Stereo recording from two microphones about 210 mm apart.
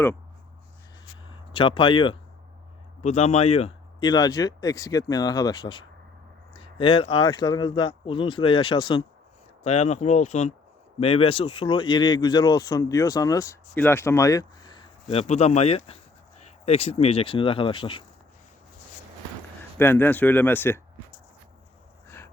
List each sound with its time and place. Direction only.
1.3 s speech: 25° left (ahead or behind)
15.1 s speech: 30° left (ahead or behind)
19.8 s speech: 10° left (ahead or behind)
22.0 s dog: 10° left (ahead or behind)